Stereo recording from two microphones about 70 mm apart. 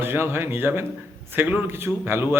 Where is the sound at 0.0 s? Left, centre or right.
Right.